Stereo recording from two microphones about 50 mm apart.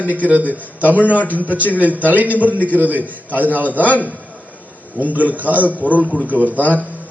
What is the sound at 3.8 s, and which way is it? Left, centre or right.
Speech, left.